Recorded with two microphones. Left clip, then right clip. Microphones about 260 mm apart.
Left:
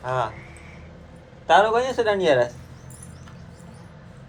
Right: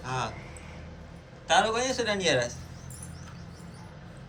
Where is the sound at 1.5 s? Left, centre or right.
Centre.